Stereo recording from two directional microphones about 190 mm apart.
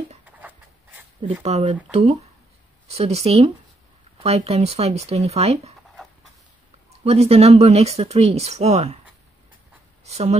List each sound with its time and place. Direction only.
1.4 s speech: 30° right (ahead or behind)
7.1 s speech: 35° right (ahead or behind)
10.0 s speech: 35° right (ahead or behind)